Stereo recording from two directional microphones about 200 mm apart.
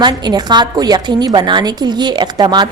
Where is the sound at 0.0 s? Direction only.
20° right (ahead or behind).